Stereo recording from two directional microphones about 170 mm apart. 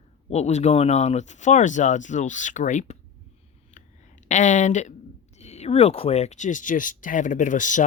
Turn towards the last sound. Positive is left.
turn(degrees=50)  # may be behind; listen again after turning